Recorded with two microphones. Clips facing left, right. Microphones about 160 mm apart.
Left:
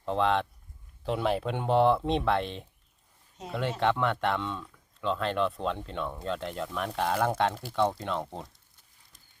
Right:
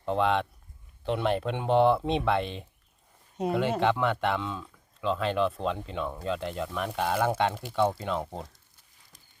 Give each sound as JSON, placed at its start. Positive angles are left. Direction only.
{"t": 0.0, "sound": "speech", "side_deg": 0}
{"t": 3.4, "sound": "speech", "side_deg": -60}
{"t": 3.8, "sound": "speech", "side_deg": 0}